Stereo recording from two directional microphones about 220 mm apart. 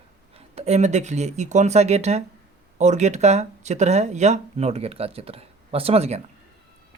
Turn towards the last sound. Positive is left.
turn(degrees=-30)  # may be behind; listen again after turning